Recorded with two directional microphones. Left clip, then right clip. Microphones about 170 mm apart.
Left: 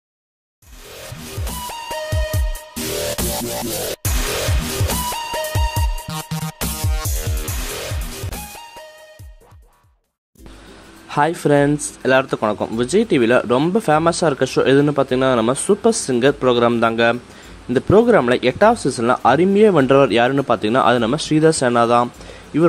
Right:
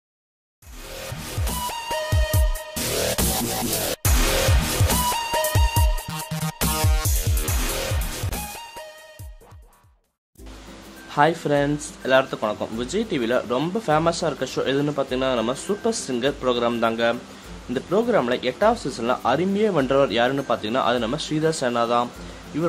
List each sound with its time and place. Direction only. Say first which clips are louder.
1.4 s music: even; centre (ahead or behind)
11.1 s speech: left 3 dB; 35° left (ahead or behind)